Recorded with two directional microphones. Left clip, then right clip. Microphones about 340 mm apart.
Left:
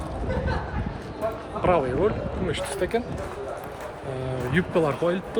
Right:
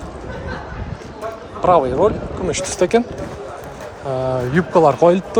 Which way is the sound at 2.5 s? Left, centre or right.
Right.